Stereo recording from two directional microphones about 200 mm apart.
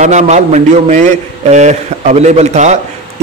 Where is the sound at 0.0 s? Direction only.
35° right (ahead or behind).